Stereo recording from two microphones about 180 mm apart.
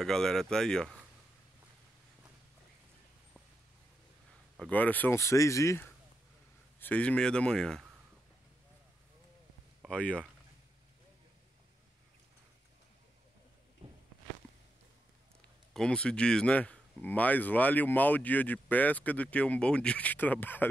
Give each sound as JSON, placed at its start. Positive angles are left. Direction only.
{"t": 0.0, "sound": "speech", "side_deg": 5}
{"t": 4.6, "sound": "speech", "side_deg": 10}
{"t": 9.8, "sound": "speech", "side_deg": 5}
{"t": 13.8, "sound": "walk", "side_deg": -30}
{"t": 15.7, "sound": "speech", "side_deg": 5}